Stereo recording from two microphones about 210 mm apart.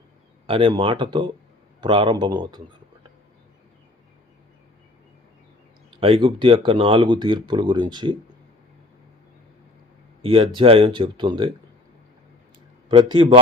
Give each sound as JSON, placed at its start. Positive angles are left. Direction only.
{"t": 0.4, "sound": "speech", "side_deg": -25}
{"t": 6.0, "sound": "speech", "side_deg": -25}
{"t": 10.2, "sound": "speech", "side_deg": -25}
{"t": 12.9, "sound": "speech", "side_deg": -25}